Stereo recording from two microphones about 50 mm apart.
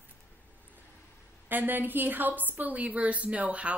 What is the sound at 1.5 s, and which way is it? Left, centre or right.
A woman's voice, right.